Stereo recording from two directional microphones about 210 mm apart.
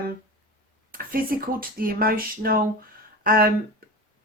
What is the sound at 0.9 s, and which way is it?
A woman's voice, 45° right (ahead or behind).